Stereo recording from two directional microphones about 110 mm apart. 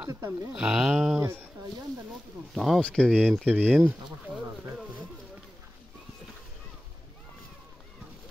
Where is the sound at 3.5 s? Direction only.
15° right (ahead or behind).